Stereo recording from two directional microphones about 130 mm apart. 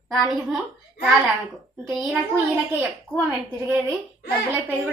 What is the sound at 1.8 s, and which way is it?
Speech, centre (ahead or behind).